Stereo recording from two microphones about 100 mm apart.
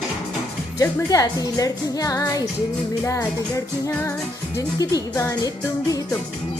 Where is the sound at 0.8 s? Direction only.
35° left (ahead or behind).